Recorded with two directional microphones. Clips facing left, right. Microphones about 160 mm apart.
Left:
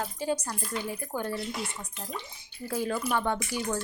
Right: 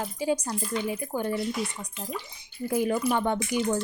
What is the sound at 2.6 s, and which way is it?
Speech, 15° right (ahead or behind).